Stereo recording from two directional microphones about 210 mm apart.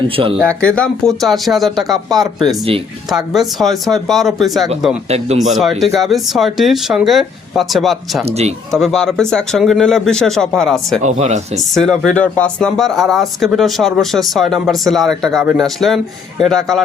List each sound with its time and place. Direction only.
0.3 s speech: 5° left (ahead or behind)
5.0 s speech: 30° right (ahead or behind)
5.8 s speech: centre (ahead or behind)
8.2 s speech: 30° right (ahead or behind)
8.8 s speech: centre (ahead or behind)
11.0 s speech: 35° right (ahead or behind)
11.7 s speech: 5° left (ahead or behind)